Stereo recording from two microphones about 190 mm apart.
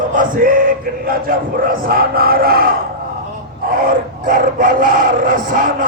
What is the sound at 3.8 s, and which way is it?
Speech, 45° right (ahead or behind).